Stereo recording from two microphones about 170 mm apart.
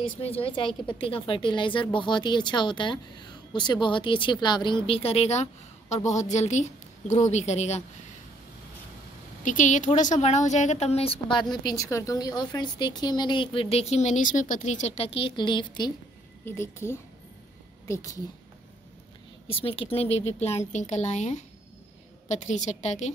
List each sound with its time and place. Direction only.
0.4 s a woman's voice: 30° left (ahead or behind)
9.4 s a woman's voice: 50° left (ahead or behind); by 15.9 s 25° left (ahead or behind)
16.4 s a woman's voice: 15° left (ahead or behind)
19.4 s a woman's voice: 35° left (ahead or behind)